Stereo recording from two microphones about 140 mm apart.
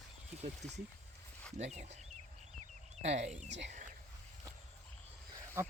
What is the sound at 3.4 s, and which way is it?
Speech, 60° right (ahead or behind).